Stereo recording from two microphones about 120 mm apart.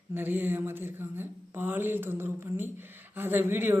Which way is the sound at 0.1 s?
15° right (ahead or behind).